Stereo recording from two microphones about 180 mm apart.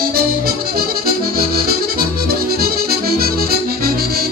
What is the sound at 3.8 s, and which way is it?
Music, 55° right (ahead or behind).